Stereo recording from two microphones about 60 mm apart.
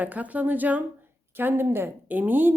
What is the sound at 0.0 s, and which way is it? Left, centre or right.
A woman's voice, right.